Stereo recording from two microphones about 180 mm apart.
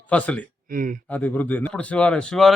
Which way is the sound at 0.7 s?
50° right (ahead or behind).